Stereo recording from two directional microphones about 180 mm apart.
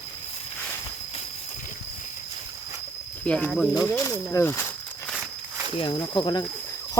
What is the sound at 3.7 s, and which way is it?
Speech, 20° left (ahead or behind).